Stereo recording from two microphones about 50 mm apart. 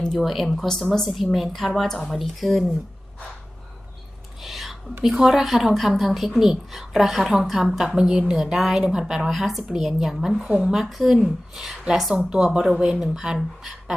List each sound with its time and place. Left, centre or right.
0.0 s speech: centre
4.4 s whispering: centre
5.0 s speech: centre
12.1 s speech: centre